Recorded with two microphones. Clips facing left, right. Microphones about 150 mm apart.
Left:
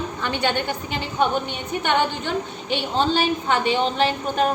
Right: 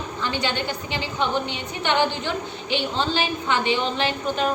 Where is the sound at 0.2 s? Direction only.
55° left (ahead or behind).